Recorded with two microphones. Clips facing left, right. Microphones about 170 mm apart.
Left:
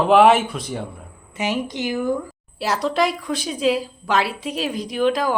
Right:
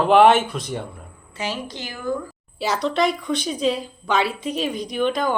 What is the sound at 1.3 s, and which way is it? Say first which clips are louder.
Speech: left 5 dB; 20° left (ahead or behind).